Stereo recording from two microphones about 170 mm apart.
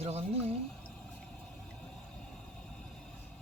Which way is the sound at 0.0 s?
35° right (ahead or behind).